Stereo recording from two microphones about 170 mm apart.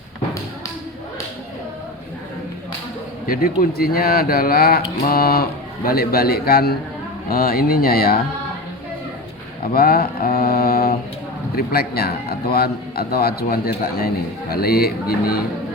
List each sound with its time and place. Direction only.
3.2 s speech: 60° left (ahead or behind)
9.7 s speech: 65° left (ahead or behind)